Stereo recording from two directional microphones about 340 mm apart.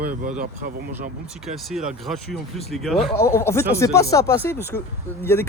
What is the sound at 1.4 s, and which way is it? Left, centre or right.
Speech, centre.